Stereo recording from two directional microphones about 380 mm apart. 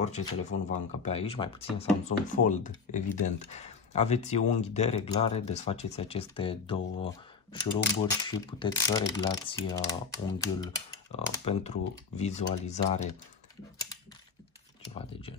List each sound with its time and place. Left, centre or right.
0.0 s speech: centre